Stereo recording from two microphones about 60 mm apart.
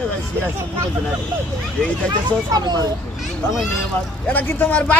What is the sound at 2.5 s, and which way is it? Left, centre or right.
Speech, right.